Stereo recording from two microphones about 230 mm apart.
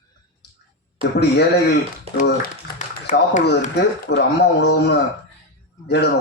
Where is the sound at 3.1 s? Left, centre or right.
Left.